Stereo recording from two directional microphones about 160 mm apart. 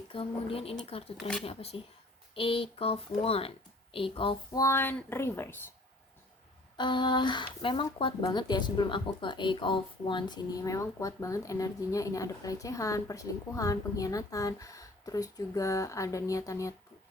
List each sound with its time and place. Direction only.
0.1 s a child's voice: 35° left (ahead or behind)
4.6 s speech: 15° left (ahead or behind)
6.7 s a woman's voice: 30° left (ahead or behind)